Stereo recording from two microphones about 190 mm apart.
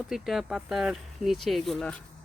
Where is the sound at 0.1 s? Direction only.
Centre (ahead or behind).